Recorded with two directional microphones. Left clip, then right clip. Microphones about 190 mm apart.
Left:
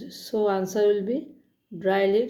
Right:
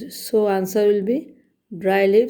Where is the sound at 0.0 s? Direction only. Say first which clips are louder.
Right 6 dB; 45° right (ahead or behind).